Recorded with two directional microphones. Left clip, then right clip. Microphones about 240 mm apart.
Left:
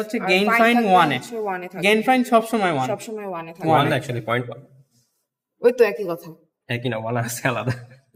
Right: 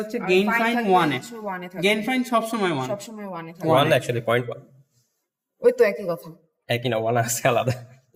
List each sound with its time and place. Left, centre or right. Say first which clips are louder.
0.1 s speech: left 2 dB; left
1.5 s speech: left 3 dB; left
3.2 s speech: left 4 dB; left
3.8 s speech: right 1 dB; centre
5.6 s speech: left 1 dB; left
6.7 s speech: right 3 dB; centre